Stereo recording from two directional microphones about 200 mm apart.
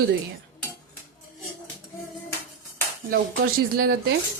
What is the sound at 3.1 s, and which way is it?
Speech, 50° right (ahead or behind).